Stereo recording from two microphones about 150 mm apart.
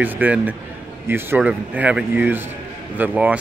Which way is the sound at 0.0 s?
10° right (ahead or behind).